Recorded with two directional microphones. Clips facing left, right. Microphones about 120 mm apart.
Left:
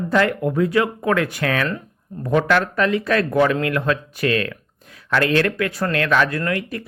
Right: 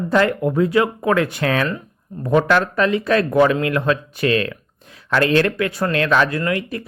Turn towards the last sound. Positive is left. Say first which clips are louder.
# right 2 dB
turn(degrees=-25)  # may be behind; listen again after turning